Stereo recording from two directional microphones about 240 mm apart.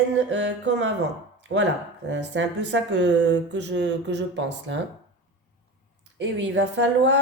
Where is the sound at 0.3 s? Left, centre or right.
Right.